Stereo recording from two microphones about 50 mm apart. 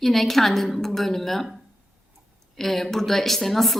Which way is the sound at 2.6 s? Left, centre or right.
Centre.